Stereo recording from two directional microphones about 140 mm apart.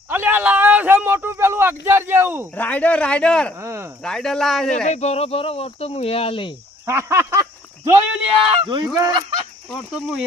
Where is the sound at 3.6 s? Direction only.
20° right (ahead or behind).